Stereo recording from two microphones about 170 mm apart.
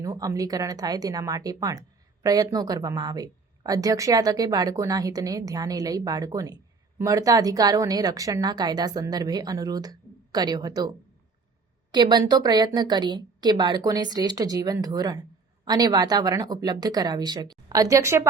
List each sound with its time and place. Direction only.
0.0 s speech: 20° right (ahead or behind)